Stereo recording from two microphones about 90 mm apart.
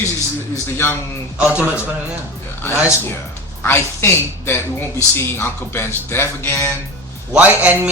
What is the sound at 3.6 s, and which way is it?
A man's voice, 25° left (ahead or behind).